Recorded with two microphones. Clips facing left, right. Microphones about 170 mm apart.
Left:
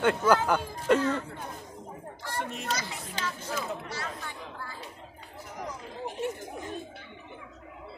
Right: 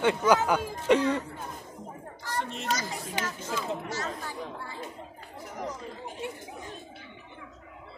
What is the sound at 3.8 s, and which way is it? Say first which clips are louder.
Speech: right 3 dB; 45° right (ahead or behind).